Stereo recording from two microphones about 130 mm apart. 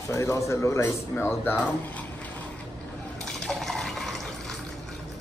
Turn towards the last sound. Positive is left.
turn(degrees=0)  # may be behind; listen again after turning